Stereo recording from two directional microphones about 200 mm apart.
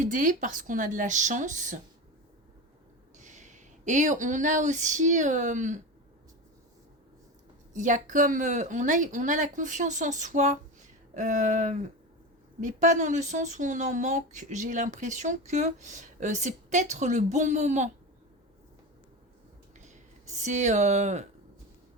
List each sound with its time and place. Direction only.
0.0 s speech: 40° right (ahead or behind)
3.2 s speech: 35° right (ahead or behind)
7.7 s speech: 40° right (ahead or behind)
19.8 s speech: 35° right (ahead or behind)